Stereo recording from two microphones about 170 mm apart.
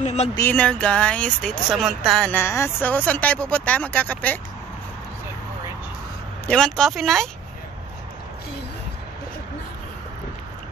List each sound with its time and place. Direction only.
0.0 s speech: 40° left (ahead or behind)
0.4 s speech: 10° left (ahead or behind)
6.4 s speech: 5° left (ahead or behind)